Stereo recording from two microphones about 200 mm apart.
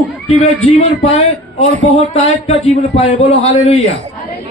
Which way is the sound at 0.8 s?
30° left (ahead or behind).